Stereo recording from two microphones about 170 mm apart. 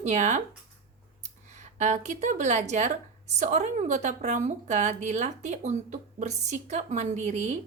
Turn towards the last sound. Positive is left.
turn(degrees=-45)  # may be behind; listen again after turning